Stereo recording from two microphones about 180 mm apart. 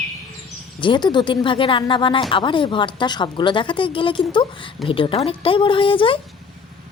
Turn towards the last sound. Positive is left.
turn(degrees=30)  # may be behind; listen again after turning